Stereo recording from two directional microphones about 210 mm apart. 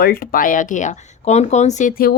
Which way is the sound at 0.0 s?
45° left (ahead or behind).